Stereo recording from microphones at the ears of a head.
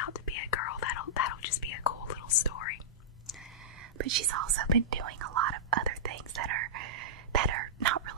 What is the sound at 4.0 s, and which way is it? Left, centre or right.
Whispering, right.